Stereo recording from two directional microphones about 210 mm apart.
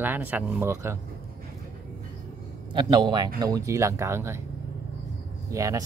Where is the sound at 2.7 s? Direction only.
20° right (ahead or behind).